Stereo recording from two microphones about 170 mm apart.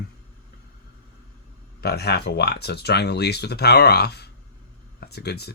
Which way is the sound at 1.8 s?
70° left (ahead or behind).